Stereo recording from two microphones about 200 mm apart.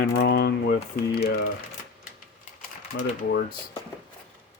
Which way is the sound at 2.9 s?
80° left.